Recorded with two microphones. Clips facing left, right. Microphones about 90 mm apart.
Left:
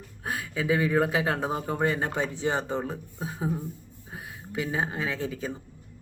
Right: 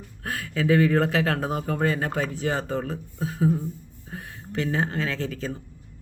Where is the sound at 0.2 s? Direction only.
20° left (ahead or behind).